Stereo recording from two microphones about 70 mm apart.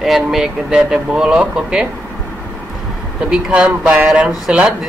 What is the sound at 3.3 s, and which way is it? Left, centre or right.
Speech, centre.